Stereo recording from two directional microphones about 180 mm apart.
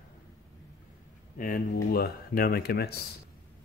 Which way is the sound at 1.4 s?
55° left (ahead or behind).